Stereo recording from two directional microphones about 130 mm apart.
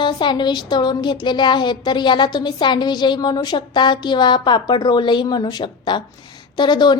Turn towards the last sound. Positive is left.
turn(degrees=35)  # may be behind; listen again after turning